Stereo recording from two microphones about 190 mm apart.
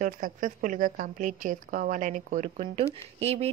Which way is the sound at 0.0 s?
45° right (ahead or behind).